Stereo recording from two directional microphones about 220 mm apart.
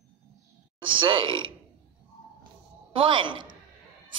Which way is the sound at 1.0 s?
20° right (ahead or behind).